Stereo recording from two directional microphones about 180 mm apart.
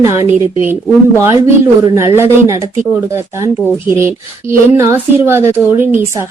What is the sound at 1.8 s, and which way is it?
Speech, 15° right (ahead or behind).